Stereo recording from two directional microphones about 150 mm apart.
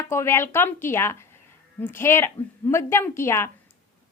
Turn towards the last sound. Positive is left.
turn(degrees=15)  # may be behind; listen again after turning